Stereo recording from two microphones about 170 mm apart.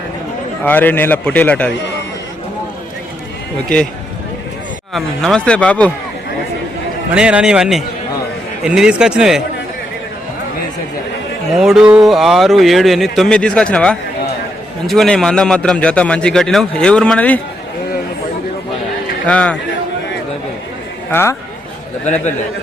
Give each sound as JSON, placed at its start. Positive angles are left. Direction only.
{"t": 0.6, "sound": "a man's voice", "side_deg": 10}
{"t": 4.9, "sound": "a man's voice", "side_deg": 0}
{"t": 7.1, "sound": "a man's voice", "side_deg": -5}
{"t": 11.5, "sound": "a man's voice", "side_deg": -5}
{"t": 19.3, "sound": "a man's voice", "side_deg": 5}
{"t": 21.1, "sound": "speech", "side_deg": 15}
{"t": 22.0, "sound": "a man's voice", "side_deg": 45}